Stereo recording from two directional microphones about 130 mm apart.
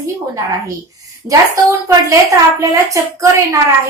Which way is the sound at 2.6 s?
25° right (ahead or behind).